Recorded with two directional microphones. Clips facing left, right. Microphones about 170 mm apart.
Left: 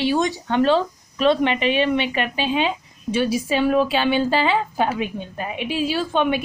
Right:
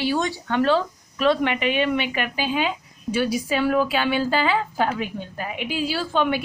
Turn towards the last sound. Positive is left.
turn(degrees=20)  # may be behind; listen again after turning